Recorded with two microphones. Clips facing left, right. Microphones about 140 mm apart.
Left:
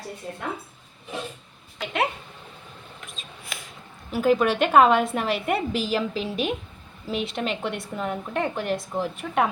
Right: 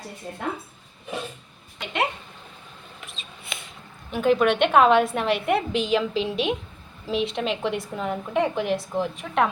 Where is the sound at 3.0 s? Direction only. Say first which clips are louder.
Even; centre (ahead or behind).